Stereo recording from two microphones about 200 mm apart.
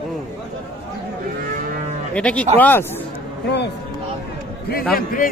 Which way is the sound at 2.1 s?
5° left (ahead or behind).